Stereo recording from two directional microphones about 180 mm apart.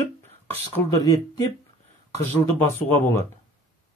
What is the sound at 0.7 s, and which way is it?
Speech, 20° left (ahead or behind).